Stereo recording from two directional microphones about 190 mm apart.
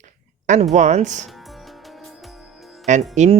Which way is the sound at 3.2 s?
40° right (ahead or behind).